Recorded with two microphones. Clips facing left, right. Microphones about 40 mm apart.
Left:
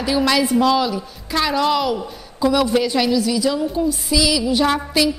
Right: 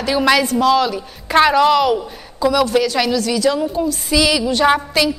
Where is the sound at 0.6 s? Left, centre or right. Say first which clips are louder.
Right 2 dB; centre.